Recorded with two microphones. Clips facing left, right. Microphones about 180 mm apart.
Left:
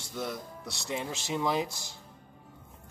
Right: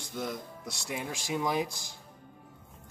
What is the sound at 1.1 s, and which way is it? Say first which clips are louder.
Speech: even; 15° right (ahead or behind).